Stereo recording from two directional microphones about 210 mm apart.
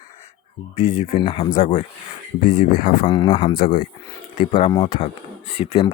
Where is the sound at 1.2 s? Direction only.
20° left (ahead or behind).